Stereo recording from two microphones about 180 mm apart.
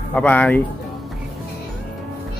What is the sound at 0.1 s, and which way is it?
Speech, 10° left (ahead or behind).